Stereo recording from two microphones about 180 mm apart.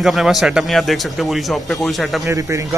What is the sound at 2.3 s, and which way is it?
Speech, 15° right (ahead or behind).